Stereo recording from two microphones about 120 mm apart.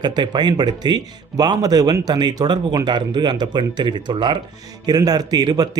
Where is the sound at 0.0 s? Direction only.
35° right (ahead or behind).